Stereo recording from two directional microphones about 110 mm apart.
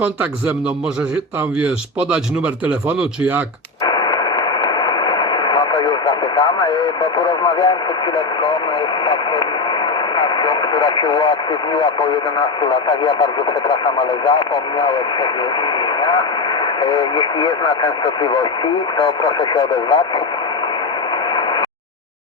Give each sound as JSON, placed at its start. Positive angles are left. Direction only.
{"t": 1.6, "sound": "speech", "side_deg": -5}
{"t": 3.8, "sound": "radio", "side_deg": 40}
{"t": 9.0, "sound": "speech", "side_deg": 45}